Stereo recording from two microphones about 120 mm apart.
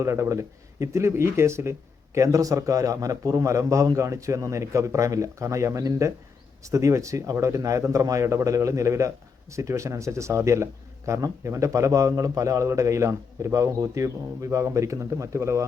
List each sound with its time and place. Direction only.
0.0 s speech: 25° right (ahead or behind)